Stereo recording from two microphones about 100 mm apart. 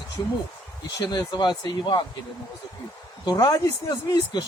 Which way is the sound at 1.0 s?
45° left (ahead or behind).